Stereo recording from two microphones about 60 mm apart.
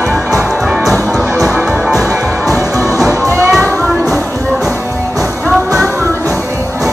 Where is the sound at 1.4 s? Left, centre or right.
Centre.